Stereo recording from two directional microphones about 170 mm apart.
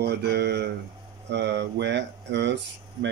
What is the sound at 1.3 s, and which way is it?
Speech, 90° right.